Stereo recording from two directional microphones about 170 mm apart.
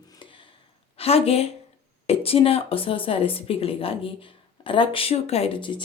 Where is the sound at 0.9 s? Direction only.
35° left (ahead or behind).